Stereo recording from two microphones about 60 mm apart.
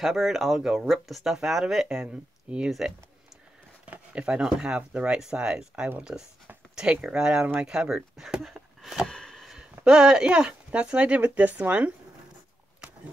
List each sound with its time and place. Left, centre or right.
0.0 s speech: centre
9.0 s speech: centre; by 11.9 s right